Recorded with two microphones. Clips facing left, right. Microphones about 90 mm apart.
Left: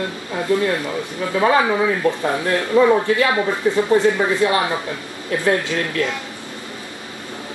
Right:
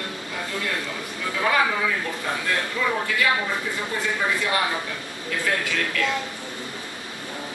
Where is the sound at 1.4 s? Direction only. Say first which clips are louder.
Left 6 dB; 30° left (ahead or behind).